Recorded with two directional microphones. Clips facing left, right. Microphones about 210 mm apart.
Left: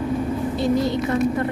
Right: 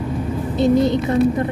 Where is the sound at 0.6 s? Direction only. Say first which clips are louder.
Right 6 dB; 20° right (ahead or behind).